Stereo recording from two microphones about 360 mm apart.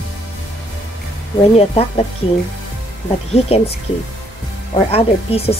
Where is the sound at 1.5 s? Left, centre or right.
Centre.